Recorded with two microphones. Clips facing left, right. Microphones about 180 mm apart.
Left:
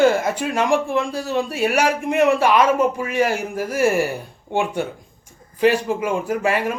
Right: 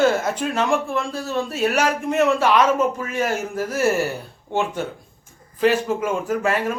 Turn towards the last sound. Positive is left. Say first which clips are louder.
# left 1 dB
turn(degrees=10)  # may be behind; listen again after turning